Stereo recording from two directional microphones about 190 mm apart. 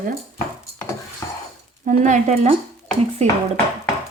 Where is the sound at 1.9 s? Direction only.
40° right (ahead or behind).